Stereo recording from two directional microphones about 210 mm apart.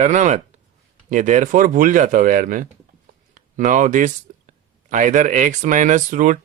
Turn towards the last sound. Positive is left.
turn(degrees=-40)  # may be behind; listen again after turning